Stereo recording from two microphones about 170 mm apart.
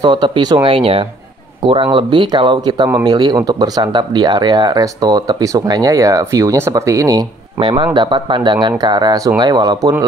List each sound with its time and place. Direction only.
0.0 s speech: 25° right (ahead or behind)